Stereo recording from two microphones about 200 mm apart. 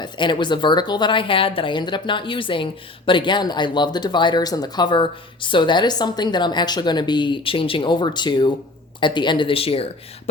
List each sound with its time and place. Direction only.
0.0 s speech: 25° left (ahead or behind)